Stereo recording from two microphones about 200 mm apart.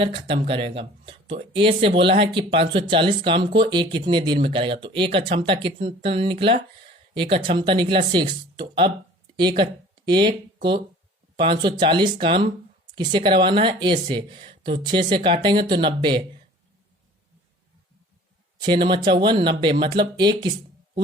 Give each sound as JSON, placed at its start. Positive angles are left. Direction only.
{"t": 0.0, "sound": "speech", "side_deg": -30}
{"t": 18.6, "sound": "speech", "side_deg": -25}